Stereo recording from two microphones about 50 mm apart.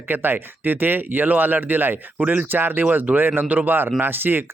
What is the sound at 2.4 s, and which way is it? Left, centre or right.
A man's voice, right.